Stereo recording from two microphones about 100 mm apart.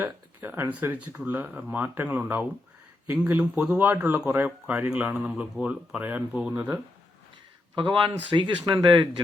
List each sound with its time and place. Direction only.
0.0 s speech: 20° right (ahead or behind)
7.8 s speech: 55° right (ahead or behind)